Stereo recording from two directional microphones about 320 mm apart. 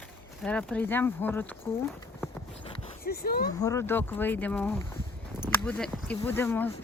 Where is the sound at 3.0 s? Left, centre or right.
Left.